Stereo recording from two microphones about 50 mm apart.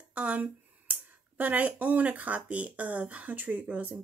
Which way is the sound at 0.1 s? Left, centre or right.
Right.